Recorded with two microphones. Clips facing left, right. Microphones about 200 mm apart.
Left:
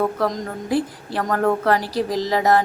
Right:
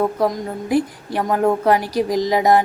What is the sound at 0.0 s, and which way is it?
A woman's voice, 15° right (ahead or behind).